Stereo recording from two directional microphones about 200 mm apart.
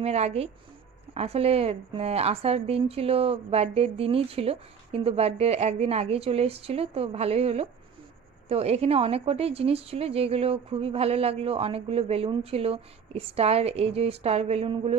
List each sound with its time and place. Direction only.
0.0 s a woman's voice: 30° right (ahead or behind)